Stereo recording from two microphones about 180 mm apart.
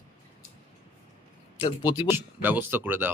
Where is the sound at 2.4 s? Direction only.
10° right (ahead or behind).